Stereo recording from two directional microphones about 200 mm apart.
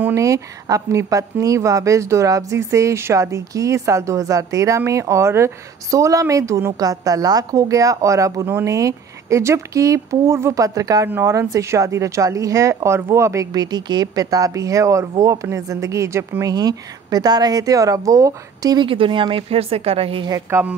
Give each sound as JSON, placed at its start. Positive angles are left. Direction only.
{"t": 0.0, "sound": "speech", "side_deg": -15}